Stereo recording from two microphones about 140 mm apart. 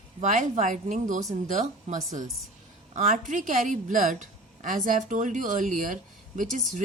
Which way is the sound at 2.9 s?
60° right (ahead or behind).